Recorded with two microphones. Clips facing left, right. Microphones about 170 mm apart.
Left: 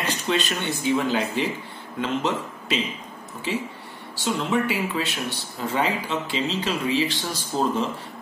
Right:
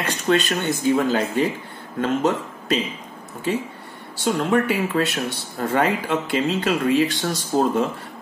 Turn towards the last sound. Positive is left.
turn(degrees=-50)  # may be behind; listen again after turning